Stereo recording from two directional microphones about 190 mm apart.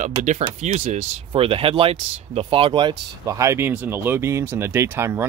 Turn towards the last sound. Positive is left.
turn(degrees=-10)  # may be behind; listen again after turning